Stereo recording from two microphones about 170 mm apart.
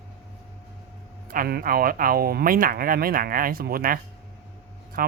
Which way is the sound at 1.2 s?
60° right (ahead or behind).